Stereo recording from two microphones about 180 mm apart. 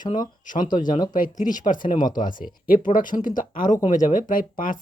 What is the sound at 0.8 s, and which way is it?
Speech, 25° left (ahead or behind).